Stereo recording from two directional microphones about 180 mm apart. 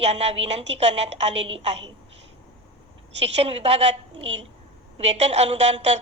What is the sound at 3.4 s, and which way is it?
A woman's voice, 35° right (ahead or behind).